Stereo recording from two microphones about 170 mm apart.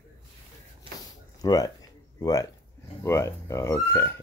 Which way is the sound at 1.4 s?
20° left (ahead or behind).